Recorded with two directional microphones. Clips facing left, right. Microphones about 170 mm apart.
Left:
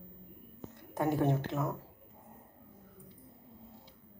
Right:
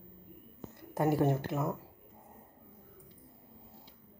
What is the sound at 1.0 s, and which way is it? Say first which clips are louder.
Speech: right 1 dB; 5° right (ahead or behind).